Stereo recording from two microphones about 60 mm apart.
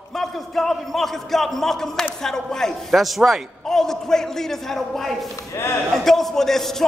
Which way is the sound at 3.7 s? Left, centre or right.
Centre.